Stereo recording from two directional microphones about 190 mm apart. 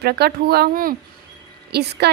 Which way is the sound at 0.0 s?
55° right (ahead or behind).